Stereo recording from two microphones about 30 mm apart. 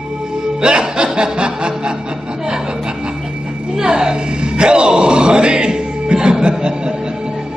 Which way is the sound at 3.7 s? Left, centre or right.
Right.